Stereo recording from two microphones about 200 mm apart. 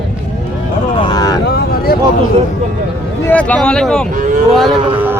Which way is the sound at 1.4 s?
50° left (ahead or behind).